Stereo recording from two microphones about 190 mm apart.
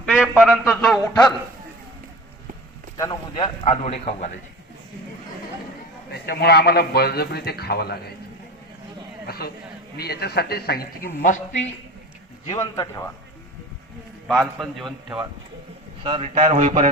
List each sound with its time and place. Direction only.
0.1 s speech: 5° right (ahead or behind)
3.0 s a man's voice: 25° left (ahead or behind)
6.2 s a man's voice: 55° left (ahead or behind)
9.2 s a sound: 55° left (ahead or behind)
10.0 s a man's voice: 55° left (ahead or behind)
12.5 s a man's voice: 20° left (ahead or behind)
14.3 s speech: centre (ahead or behind)
16.0 s a sound: 30° right (ahead or behind)